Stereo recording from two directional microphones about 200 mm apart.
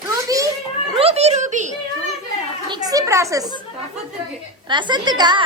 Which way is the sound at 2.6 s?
20° right (ahead or behind).